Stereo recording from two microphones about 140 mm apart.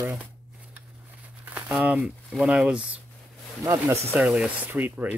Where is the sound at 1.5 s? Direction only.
10° right (ahead or behind).